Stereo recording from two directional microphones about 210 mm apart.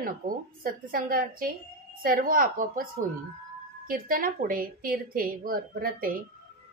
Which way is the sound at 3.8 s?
40° right (ahead or behind).